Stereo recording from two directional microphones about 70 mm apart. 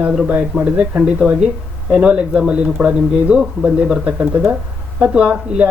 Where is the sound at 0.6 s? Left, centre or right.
Centre.